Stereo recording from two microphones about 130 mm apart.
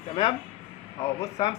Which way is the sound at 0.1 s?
45° left (ahead or behind).